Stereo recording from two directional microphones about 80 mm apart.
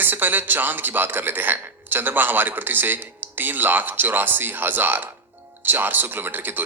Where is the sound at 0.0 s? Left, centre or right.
Right.